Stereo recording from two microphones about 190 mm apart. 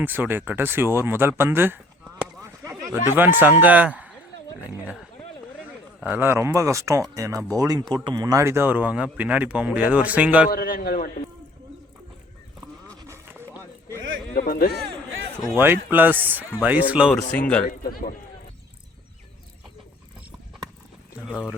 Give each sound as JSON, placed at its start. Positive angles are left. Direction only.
{"t": 0.0, "sound": "speech", "side_deg": -10}
{"t": 10.5, "sound": "a man's voice", "side_deg": 50}
{"t": 13.0, "sound": "a sound", "side_deg": -15}
{"t": 14.3, "sound": "a man's voice", "side_deg": 50}
{"t": 15.5, "sound": "speech", "side_deg": -10}
{"t": 17.3, "sound": "speech", "side_deg": 10}
{"t": 17.6, "sound": "a man's voice", "side_deg": 45}
{"t": 21.2, "sound": "speech", "side_deg": 10}